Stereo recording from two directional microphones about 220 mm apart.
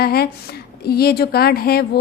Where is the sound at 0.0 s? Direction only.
45° left (ahead or behind).